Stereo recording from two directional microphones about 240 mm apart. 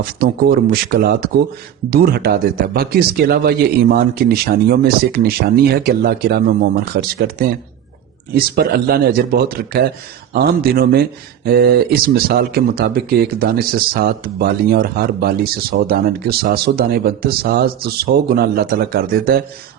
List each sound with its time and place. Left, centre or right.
0.0 s speech: right